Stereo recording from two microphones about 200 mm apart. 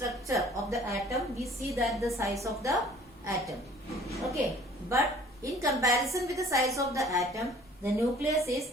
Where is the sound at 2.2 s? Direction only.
15° right (ahead or behind).